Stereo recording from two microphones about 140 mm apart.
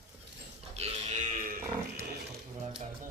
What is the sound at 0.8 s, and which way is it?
Pig, 50° right (ahead or behind).